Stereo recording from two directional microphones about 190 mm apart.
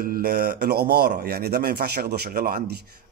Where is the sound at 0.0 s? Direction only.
50° right (ahead or behind).